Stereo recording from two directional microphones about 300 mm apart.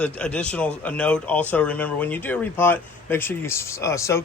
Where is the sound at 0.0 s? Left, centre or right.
Centre.